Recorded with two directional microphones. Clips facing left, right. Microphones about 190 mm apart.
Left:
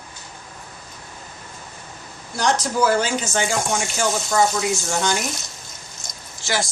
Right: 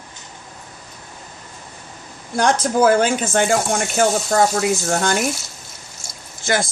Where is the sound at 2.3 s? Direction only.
55° right (ahead or behind).